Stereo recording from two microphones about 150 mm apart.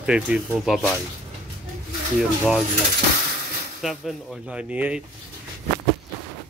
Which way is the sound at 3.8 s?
Centre (ahead or behind).